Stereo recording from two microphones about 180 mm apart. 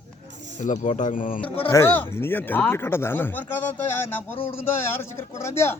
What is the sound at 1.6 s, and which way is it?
Speech, 15° left (ahead or behind).